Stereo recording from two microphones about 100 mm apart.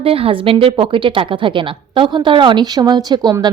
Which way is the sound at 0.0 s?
70° right (ahead or behind).